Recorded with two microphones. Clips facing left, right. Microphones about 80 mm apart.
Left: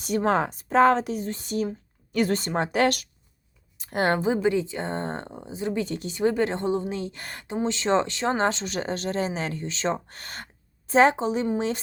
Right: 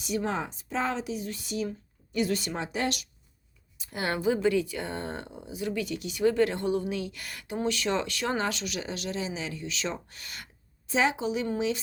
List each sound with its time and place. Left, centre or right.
0.0 s speech: left
2.7 s speech: left
3.8 s speech: left
4.4 s a woman's voice: left